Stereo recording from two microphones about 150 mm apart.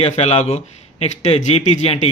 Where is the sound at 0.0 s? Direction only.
40° left (ahead or behind).